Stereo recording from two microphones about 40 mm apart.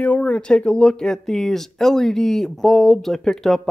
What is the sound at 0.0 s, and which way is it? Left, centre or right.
Speech, left.